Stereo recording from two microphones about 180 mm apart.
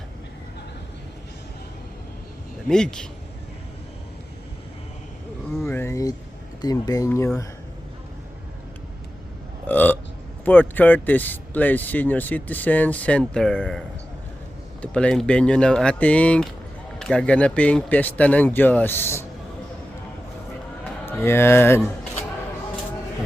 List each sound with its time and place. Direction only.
2.6 s speech: 5° left (ahead or behind)
5.5 s a sound: 5° left (ahead or behind)
5.8 s a sound: 20° left (ahead or behind)
6.6 s speech: 20° left (ahead or behind)
9.6 s burping: 10° left (ahead or behind)
10.4 s speech: 10° left (ahead or behind)
21.1 s speech: 15° left (ahead or behind)